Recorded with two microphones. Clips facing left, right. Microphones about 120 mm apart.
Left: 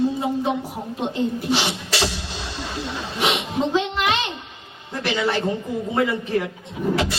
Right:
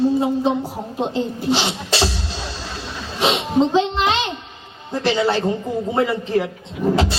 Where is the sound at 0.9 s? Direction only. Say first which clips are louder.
Right 1 dB; 25° right (ahead or behind).